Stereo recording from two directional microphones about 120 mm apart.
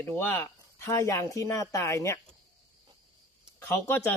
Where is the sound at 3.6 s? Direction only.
15° left (ahead or behind).